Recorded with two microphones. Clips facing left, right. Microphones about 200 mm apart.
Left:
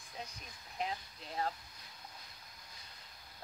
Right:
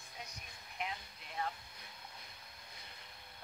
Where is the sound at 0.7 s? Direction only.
30° left (ahead or behind).